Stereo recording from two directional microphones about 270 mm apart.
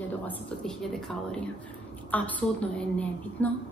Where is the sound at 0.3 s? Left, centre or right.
Centre.